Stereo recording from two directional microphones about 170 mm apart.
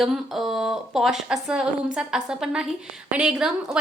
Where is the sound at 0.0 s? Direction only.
Centre (ahead or behind).